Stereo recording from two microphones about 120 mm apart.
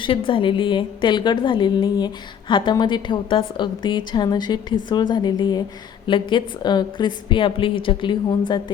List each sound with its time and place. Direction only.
0.0 s a woman's voice: 45° left (ahead or behind)